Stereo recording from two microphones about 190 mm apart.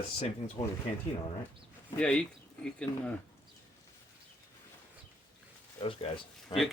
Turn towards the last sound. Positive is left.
turn(degrees=30)  # may be behind; listen again after turning